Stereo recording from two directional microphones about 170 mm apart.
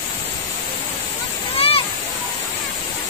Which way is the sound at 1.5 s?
35° left (ahead or behind).